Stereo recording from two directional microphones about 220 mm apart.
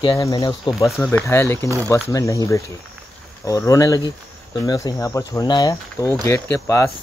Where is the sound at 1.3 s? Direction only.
10° left (ahead or behind).